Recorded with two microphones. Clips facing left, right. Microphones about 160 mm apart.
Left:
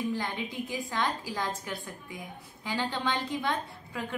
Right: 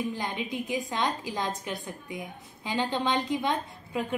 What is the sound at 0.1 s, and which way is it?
A woman's voice, 20° right (ahead or behind).